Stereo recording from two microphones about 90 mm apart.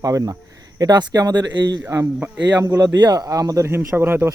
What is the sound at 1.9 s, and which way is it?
Speech, 20° right (ahead or behind).